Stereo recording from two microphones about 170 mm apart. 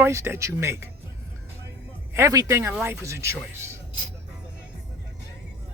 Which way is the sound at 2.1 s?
20° right (ahead or behind).